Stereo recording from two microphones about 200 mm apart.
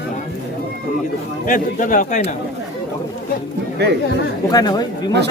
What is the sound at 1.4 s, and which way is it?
Speech, 40° left (ahead or behind).